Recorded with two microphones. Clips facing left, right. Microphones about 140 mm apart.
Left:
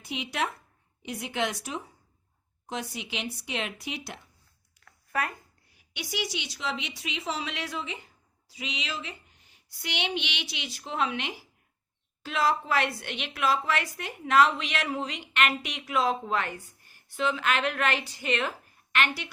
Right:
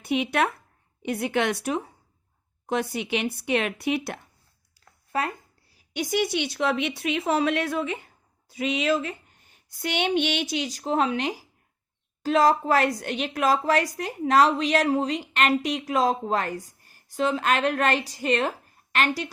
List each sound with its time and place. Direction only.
0.0 s speech: 60° right (ahead or behind)
4.9 s a sound: 30° right (ahead or behind)
5.7 s a woman's voice: 45° right (ahead or behind)